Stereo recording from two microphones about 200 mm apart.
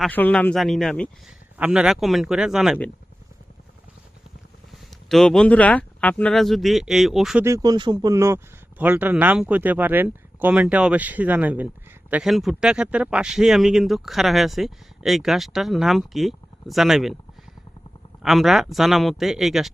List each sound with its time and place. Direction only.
0.0 s a man's voice: 5° left (ahead or behind)
4.9 s a man's voice: centre (ahead or behind)
7.4 s a man's voice: 15° right (ahead or behind); by 17.2 s centre (ahead or behind)
18.2 s a man's voice: centre (ahead or behind)